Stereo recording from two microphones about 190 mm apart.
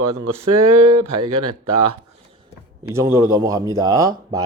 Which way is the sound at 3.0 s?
15° right (ahead or behind).